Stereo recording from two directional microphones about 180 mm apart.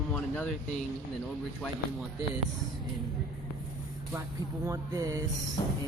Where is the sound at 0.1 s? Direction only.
5° left (ahead or behind).